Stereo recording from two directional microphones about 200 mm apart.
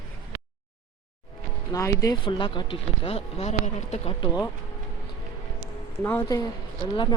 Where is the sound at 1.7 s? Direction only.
15° left (ahead or behind).